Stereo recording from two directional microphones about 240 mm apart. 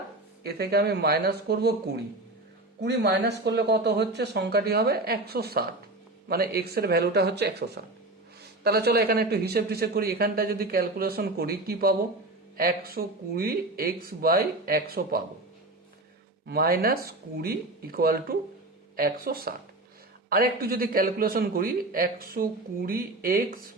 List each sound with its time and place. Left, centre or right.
0.4 s speech: right
2.8 s speech: right
16.5 s speech: right